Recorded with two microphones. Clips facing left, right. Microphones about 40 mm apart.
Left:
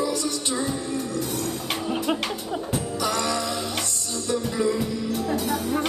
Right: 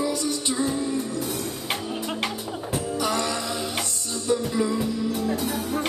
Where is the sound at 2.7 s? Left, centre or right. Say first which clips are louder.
Right 2 dB; centre.